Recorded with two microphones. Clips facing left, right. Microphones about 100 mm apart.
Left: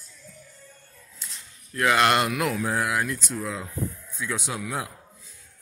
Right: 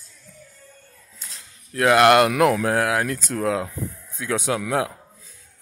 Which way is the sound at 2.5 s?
85° right.